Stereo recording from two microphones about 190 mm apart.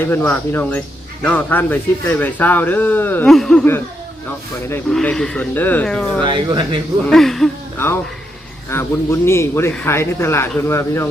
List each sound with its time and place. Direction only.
0.1 s speech: 10° left (ahead or behind)
6.2 s speech: 25° right (ahead or behind)
7.1 s speech: centre (ahead or behind)
8.7 s speech: 15° left (ahead or behind)